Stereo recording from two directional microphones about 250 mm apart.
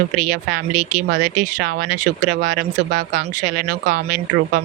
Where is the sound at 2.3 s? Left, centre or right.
Right.